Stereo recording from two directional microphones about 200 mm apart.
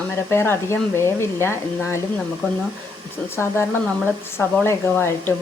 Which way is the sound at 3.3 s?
10° left (ahead or behind).